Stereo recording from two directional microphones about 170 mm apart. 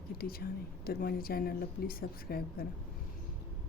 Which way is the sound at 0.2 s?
60° left (ahead or behind).